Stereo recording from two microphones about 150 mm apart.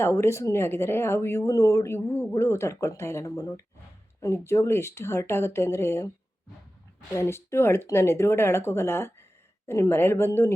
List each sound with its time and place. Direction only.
0.0 s speech: 15° left (ahead or behind)
7.1 s speech: 20° left (ahead or behind)